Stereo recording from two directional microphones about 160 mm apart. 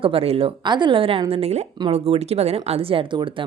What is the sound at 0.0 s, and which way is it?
Speech, 35° right (ahead or behind).